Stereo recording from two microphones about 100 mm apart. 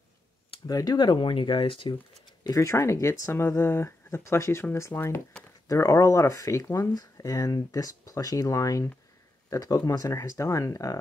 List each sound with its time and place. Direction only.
0.7 s speech: 40° left (ahead or behind); by 2.0 s 55° left (ahead or behind)
2.4 s speech: 30° left (ahead or behind)